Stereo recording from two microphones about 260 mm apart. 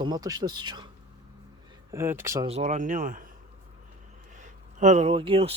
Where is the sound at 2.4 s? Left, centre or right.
Right.